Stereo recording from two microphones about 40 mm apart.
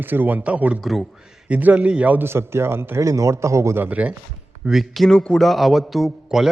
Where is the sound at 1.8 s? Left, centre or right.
Right.